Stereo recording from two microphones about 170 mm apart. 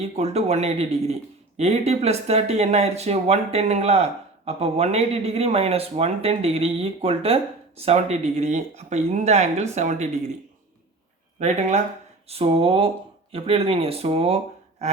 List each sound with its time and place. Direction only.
0.0 s speech: 40° right (ahead or behind)
11.3 s speech: 45° right (ahead or behind)